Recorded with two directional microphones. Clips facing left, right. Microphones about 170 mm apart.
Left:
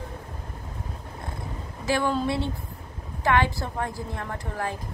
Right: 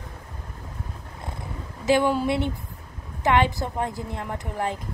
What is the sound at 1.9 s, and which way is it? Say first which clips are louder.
A woman's voice: right 4 dB; 15° right (ahead or behind).